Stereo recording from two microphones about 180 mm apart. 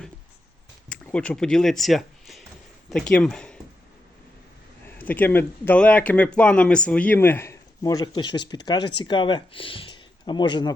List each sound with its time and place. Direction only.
0.9 s speech: 5° left (ahead or behind)
4.9 s speech: 10° left (ahead or behind)